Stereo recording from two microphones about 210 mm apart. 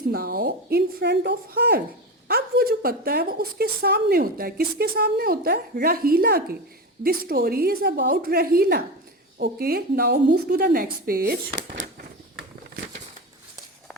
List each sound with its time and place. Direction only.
0.1 s a woman's voice: 45° right (ahead or behind)